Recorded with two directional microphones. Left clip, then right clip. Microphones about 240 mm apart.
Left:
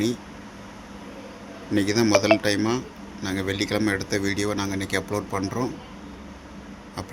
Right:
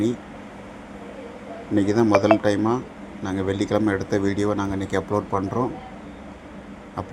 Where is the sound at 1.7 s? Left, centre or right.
Centre.